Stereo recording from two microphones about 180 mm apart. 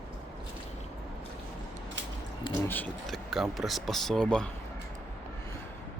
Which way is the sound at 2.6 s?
10° left (ahead or behind).